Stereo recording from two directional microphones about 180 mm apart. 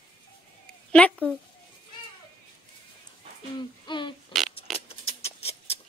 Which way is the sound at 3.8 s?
25° left (ahead or behind).